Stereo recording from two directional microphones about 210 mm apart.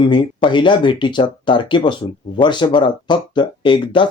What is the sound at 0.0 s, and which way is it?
Speech, 20° left (ahead or behind).